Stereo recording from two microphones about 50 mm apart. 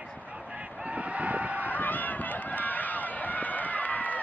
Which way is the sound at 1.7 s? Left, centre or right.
Left.